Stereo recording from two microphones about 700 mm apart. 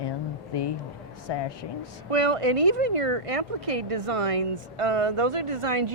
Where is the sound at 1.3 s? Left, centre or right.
Left.